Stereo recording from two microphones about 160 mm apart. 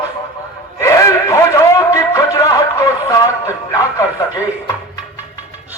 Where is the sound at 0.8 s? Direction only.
20° left (ahead or behind).